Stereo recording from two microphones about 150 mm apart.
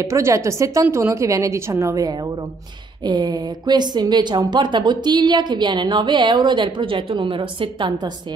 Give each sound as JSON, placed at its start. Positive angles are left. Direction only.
{"t": 0.0, "sound": "a woman's voice", "side_deg": -20}